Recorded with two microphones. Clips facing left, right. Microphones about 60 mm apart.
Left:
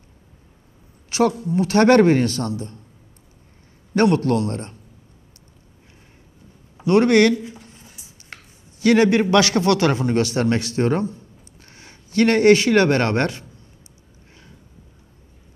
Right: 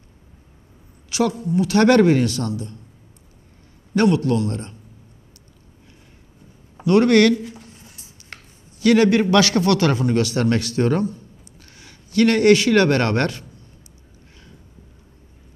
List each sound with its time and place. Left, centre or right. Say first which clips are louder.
1.1 s speech: left 1 dB; left
3.9 s speech: even; left
6.9 s a man's voice: even; left
7.3 s speech: even; centre
7.8 s a sound: right 1 dB; centre
8.8 s a man's voice: even; left